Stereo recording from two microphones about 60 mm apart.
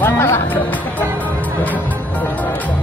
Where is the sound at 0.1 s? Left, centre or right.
Left.